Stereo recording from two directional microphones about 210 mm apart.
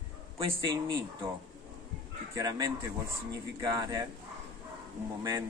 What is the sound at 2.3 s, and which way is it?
Speech, 15° right (ahead or behind).